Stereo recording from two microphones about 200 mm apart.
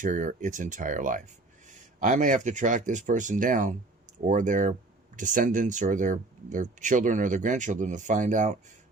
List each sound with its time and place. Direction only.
0.0 s speech: 40° right (ahead or behind)